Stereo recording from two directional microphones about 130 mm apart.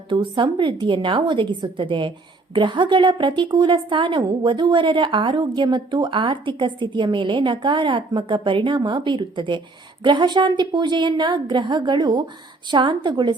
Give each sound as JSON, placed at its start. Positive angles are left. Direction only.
{"t": 0.1, "sound": "a woman's voice", "side_deg": -40}